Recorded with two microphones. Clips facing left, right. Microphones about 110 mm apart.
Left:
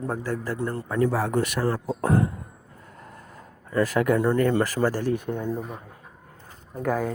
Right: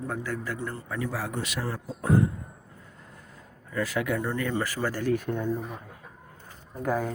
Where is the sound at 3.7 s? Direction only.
45° left (ahead or behind).